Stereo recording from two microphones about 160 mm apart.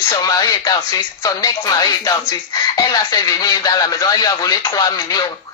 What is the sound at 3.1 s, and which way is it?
Speech, 25° left (ahead or behind).